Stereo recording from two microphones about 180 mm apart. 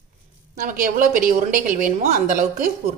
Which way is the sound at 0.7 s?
50° right (ahead or behind).